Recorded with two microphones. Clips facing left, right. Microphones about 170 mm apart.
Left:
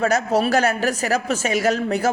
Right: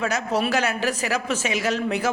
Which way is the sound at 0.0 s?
45° left (ahead or behind).